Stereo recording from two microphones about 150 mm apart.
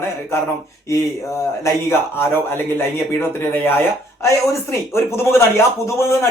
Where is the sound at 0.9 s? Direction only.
20° left (ahead or behind).